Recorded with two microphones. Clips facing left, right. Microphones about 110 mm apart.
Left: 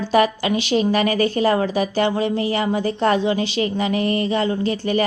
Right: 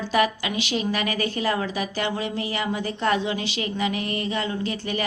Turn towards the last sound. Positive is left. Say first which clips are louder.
# left 7 dB
turn(degrees=35)  # may be behind; listen again after turning